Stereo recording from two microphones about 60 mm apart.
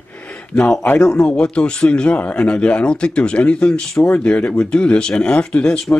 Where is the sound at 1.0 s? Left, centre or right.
Centre.